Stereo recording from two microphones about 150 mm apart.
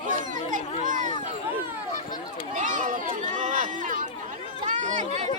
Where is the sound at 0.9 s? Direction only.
60° right (ahead or behind).